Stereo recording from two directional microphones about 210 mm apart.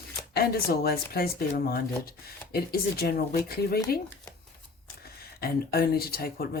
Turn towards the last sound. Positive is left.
turn(degrees=45)  # may be behind; listen again after turning